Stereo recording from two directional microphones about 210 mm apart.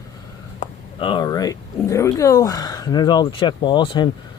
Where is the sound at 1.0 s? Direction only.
25° left (ahead or behind).